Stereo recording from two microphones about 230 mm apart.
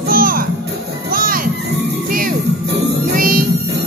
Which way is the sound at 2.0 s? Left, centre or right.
Right.